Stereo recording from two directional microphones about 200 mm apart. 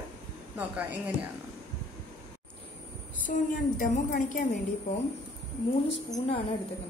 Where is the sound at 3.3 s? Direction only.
45° left (ahead or behind).